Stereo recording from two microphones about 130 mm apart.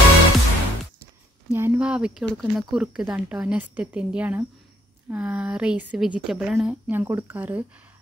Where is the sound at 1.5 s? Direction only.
20° right (ahead or behind).